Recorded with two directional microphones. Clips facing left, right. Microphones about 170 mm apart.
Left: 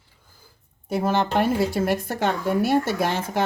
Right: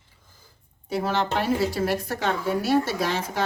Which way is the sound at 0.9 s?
50° left (ahead or behind).